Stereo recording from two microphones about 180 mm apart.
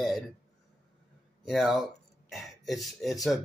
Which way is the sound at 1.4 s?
Centre (ahead or behind).